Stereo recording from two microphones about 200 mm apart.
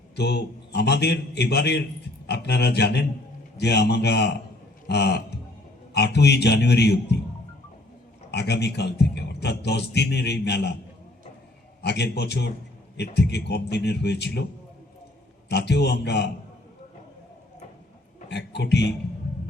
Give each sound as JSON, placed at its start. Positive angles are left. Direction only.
{"t": 0.2, "sound": "a man's voice", "side_deg": 55}
{"t": 8.3, "sound": "a man's voice", "side_deg": 55}
{"t": 11.8, "sound": "a man's voice", "side_deg": 55}
{"t": 15.4, "sound": "a man's voice", "side_deg": 55}
{"t": 18.3, "sound": "a man's voice", "side_deg": 60}